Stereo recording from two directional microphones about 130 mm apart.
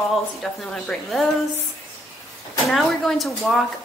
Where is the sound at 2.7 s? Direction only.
5° left (ahead or behind).